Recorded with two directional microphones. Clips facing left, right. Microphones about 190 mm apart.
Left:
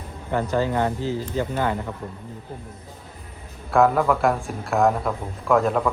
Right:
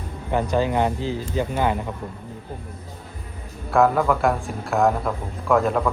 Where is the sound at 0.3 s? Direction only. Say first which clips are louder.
Right 1 dB; 20° right (ahead or behind).